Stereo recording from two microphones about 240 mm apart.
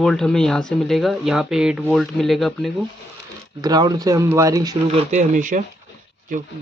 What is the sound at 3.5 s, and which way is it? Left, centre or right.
Speech, centre.